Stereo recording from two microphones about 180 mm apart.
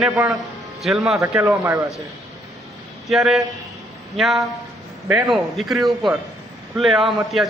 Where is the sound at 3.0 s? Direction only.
Centre (ahead or behind).